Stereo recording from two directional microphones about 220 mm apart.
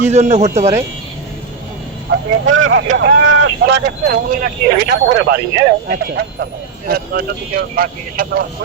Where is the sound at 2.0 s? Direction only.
65° right (ahead or behind).